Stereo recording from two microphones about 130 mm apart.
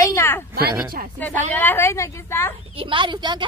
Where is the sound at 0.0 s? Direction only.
20° left (ahead or behind).